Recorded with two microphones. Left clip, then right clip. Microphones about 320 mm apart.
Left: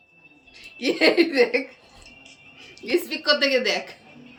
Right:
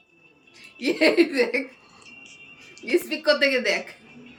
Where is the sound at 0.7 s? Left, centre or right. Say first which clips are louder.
Left 1 dB; centre.